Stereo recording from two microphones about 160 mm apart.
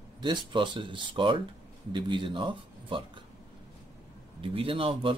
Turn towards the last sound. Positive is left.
turn(degrees=-35)  # may be behind; listen again after turning